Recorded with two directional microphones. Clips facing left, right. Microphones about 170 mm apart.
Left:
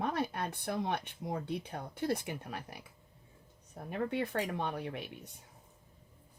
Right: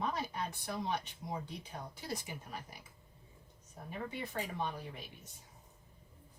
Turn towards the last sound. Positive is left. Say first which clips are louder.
# left 4 dB
turn(degrees=65)  # may be behind; listen again after turning